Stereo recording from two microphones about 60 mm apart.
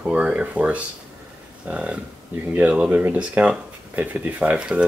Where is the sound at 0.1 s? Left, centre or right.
Centre.